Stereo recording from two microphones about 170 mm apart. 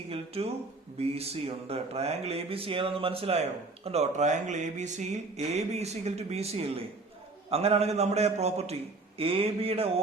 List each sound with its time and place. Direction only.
0.1 s speech: 35° right (ahead or behind)